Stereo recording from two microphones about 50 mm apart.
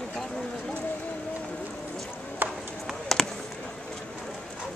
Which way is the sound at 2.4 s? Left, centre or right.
Right.